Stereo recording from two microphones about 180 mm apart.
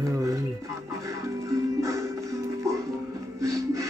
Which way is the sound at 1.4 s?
20° right (ahead or behind).